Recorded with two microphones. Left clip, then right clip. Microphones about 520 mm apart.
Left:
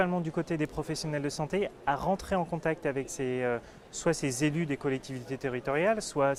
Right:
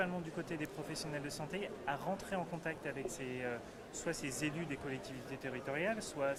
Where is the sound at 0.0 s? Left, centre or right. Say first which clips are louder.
Left 10 dB; left.